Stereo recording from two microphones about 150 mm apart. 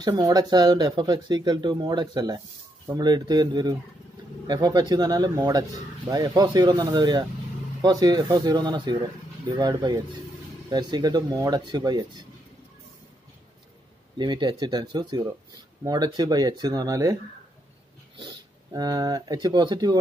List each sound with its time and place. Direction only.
0.0 s speech: 25° right (ahead or behind)
14.1 s speech: 30° right (ahead or behind)